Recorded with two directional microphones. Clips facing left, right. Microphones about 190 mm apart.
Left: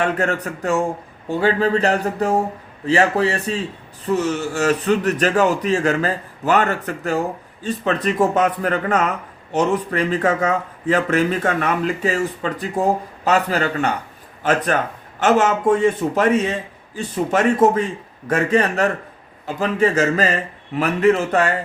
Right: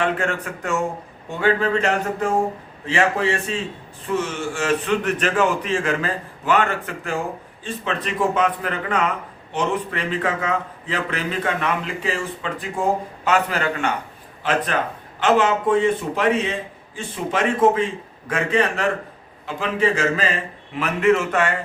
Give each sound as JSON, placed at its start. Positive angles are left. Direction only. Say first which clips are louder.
{"t": 0.0, "sound": "a man's voice", "louder": "left 2 dB", "side_deg": 40}